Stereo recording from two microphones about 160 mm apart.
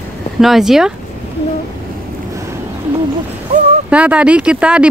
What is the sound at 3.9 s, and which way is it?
Speech, 5° right (ahead or behind).